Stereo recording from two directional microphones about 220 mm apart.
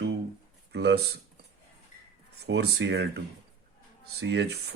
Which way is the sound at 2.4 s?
50° right (ahead or behind).